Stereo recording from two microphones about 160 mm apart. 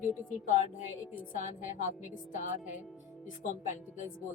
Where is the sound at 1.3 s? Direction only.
55° left (ahead or behind).